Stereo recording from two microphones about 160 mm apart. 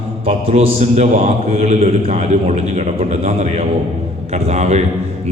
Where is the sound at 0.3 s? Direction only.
40° right (ahead or behind).